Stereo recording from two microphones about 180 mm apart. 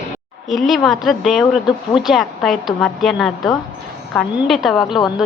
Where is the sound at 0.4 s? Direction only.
Centre (ahead or behind).